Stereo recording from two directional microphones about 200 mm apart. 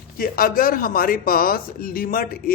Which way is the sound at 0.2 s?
45° left (ahead or behind).